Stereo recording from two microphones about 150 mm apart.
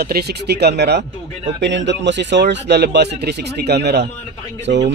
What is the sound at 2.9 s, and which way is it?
Speech, 90° right.